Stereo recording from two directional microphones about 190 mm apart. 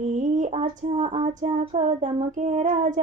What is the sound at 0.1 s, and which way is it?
Female singing, 40° right (ahead or behind).